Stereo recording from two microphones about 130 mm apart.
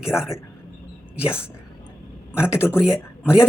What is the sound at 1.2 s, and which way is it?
Speech, 15° left (ahead or behind).